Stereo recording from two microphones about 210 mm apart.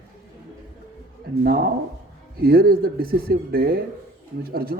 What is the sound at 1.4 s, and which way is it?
A man's voice, 45° right (ahead or behind).